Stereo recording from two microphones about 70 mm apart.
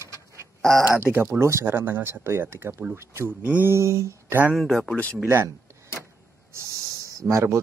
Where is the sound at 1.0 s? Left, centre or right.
Right.